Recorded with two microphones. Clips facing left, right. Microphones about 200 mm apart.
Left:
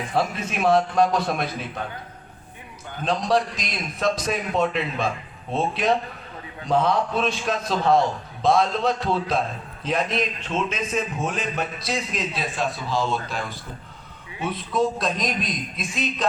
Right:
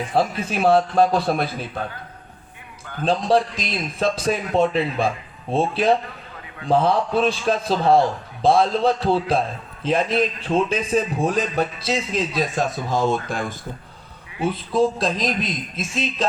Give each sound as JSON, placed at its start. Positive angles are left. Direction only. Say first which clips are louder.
{"t": 0.1, "sound": "a man's voice", "louder": "right 3 dB", "side_deg": -30}
{"t": 3.0, "sound": "a man's voice", "louder": "right 3 dB", "side_deg": -30}
{"t": 12.3, "sound": "speech", "louder": "right 4 dB", "side_deg": -40}
{"t": 14.3, "sound": "a man's voice", "louder": "right 4 dB", "side_deg": -30}